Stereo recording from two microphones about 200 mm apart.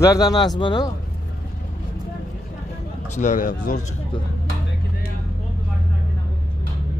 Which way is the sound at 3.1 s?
40° left (ahead or behind).